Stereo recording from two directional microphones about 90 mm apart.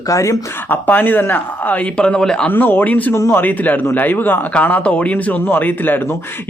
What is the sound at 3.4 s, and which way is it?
Speech, 20° left (ahead or behind).